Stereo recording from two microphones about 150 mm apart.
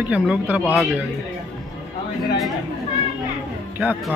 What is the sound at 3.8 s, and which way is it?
Speech, 5° right (ahead or behind).